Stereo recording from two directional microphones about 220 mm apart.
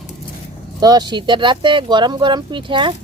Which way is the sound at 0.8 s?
20° right (ahead or behind).